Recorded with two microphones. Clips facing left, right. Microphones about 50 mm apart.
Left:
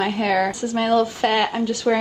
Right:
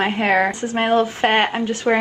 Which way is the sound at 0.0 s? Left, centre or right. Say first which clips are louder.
Right 2 dB; right.